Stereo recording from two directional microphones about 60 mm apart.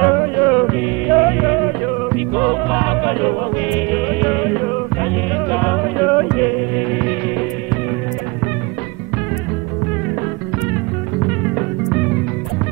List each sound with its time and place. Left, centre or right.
0.0 s music: centre
6.9 s hum: centre
11.5 s music: centre